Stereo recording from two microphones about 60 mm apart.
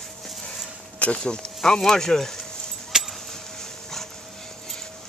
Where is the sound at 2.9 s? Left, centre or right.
Centre.